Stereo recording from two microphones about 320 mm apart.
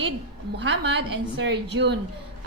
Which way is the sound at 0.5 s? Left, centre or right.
Right.